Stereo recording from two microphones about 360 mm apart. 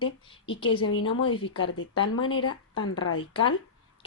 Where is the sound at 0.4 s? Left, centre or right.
Centre.